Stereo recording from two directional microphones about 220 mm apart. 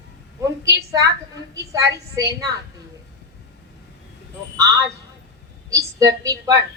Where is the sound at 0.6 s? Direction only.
15° right (ahead or behind).